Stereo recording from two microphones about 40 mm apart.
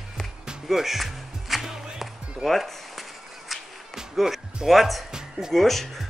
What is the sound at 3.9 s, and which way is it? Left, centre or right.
Speech, centre.